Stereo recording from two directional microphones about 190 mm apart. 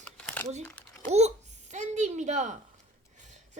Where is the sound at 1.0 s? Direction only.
35° right (ahead or behind).